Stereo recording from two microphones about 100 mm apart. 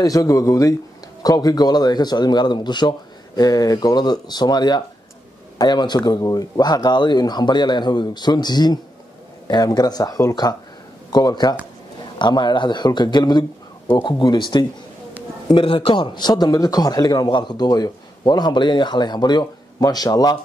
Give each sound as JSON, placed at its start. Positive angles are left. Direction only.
{"t": 0.0, "sound": "speech", "side_deg": 35}
{"t": 5.9, "sound": "speech", "side_deg": 35}